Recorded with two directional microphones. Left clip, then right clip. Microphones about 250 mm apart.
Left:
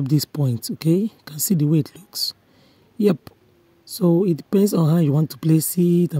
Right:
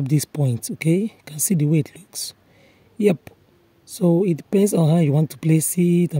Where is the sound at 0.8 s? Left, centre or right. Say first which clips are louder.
Left 1 dB; centre.